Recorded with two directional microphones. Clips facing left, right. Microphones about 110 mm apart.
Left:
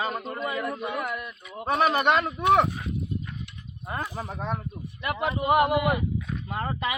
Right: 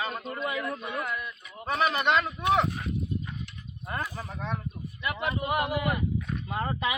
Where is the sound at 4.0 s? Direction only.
25° left (ahead or behind).